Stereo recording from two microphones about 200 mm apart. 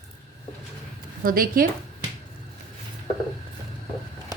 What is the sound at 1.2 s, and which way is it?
Speech, 45° right (ahead or behind).